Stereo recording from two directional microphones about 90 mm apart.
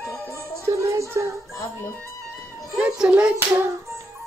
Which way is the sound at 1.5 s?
40° left (ahead or behind).